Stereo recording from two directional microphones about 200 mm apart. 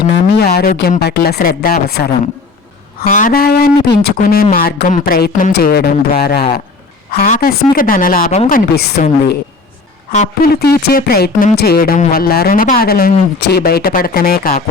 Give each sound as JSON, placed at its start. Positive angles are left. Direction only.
{"t": 0.1, "sound": "speech", "side_deg": 55}
{"t": 3.0, "sound": "speech", "side_deg": 40}
{"t": 10.1, "sound": "a woman's voice", "side_deg": 35}
{"t": 10.5, "sound": "speech", "side_deg": 50}